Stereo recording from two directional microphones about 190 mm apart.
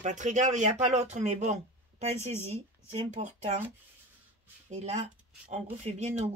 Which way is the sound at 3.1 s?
35° right (ahead or behind).